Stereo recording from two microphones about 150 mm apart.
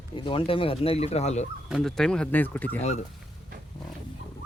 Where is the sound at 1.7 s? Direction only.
Centre (ahead or behind).